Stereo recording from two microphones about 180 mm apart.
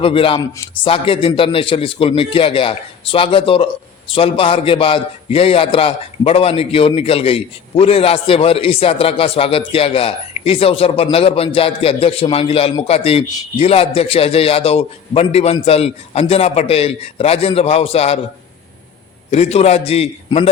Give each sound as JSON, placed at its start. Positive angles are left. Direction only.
{"t": 0.0, "sound": "a man's voice", "side_deg": 30}
{"t": 19.3, "sound": "a man's voice", "side_deg": 35}